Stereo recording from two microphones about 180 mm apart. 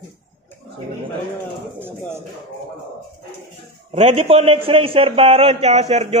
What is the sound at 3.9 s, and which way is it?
A man's voice, 30° right (ahead or behind).